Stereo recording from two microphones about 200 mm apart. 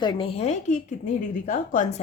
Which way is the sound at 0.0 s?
25° left (ahead or behind).